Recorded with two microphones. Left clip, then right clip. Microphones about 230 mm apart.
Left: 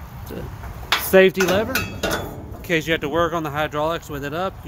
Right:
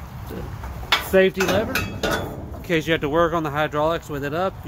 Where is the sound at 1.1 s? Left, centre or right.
Left.